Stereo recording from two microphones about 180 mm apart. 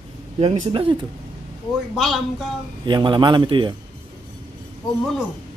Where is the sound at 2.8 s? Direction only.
25° right (ahead or behind).